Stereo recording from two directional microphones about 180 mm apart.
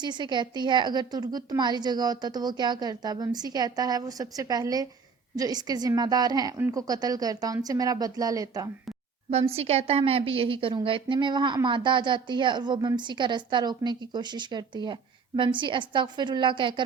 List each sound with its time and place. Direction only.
0.0 s a woman's voice: 25° right (ahead or behind)
9.3 s a woman's voice: 35° right (ahead or behind)